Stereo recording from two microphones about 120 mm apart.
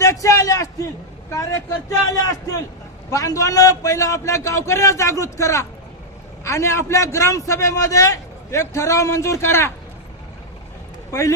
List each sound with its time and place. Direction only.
0.0 s a man's voice: 25° left (ahead or behind)